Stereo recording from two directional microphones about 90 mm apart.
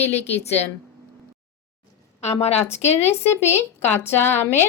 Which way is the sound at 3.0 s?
25° left (ahead or behind).